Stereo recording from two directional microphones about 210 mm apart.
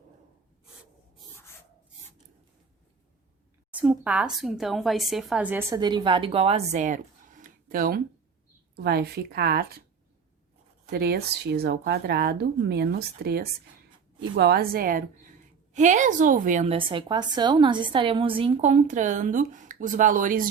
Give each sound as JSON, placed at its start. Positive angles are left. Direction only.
{"t": 3.7, "sound": "a woman's voice", "side_deg": -5}
{"t": 10.8, "sound": "a woman's voice", "side_deg": -50}